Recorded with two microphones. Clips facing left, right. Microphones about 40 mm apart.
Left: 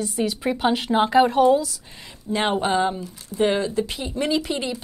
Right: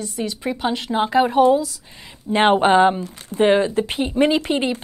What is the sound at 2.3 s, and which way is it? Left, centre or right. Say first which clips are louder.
Speech: right 7 dB; right.